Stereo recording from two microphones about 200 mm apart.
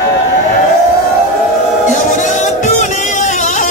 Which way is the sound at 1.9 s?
40° left (ahead or behind).